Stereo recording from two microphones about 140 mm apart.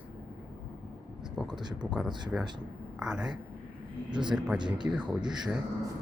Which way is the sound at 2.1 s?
30° right (ahead or behind).